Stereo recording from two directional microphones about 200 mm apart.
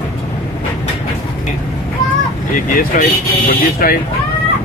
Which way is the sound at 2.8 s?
45° left (ahead or behind).